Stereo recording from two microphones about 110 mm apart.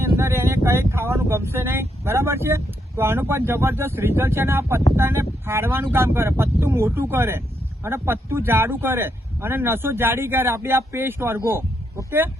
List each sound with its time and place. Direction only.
0.0 s speech: 25° right (ahead or behind)